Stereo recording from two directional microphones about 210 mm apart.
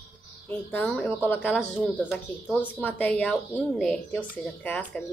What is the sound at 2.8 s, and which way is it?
Speech, 10° left (ahead or behind).